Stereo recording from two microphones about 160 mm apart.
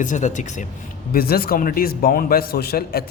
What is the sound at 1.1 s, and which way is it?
A man's voice, 70° left (ahead or behind).